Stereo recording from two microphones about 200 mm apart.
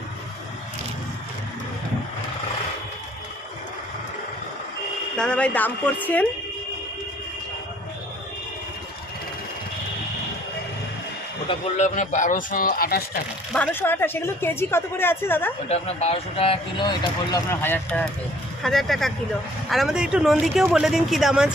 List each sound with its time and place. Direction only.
5.1 s speech: 5° left (ahead or behind)
11.4 s speech: 30° left (ahead or behind)
13.5 s speech: 10° left (ahead or behind)
15.7 s speech: 30° left (ahead or behind)
17.3 s speech: 10° left (ahead or behind)